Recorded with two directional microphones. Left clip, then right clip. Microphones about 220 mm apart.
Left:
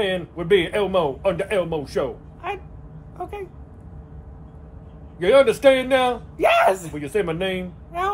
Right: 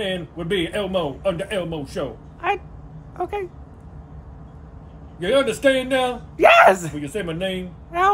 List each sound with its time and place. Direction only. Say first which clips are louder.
0.0 s a man's voice: left 2 dB; 15° left (ahead or behind)
2.4 s a sound: right 7 dB; 45° right (ahead or behind)
3.2 s speech: right 6 dB; 45° right (ahead or behind)
5.2 s a man's voice: left 4 dB; 15° left (ahead or behind)
6.3 s speech: right 6 dB; 45° right (ahead or behind)
7.0 s a man's voice: left 3 dB; 15° left (ahead or behind)
7.9 s speech: right 6 dB; 45° right (ahead or behind)